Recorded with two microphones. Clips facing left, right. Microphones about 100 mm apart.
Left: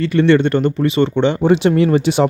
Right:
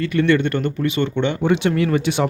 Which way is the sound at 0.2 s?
25° left (ahead or behind).